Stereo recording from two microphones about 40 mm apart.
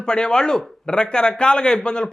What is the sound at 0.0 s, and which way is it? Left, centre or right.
A man's voice, left.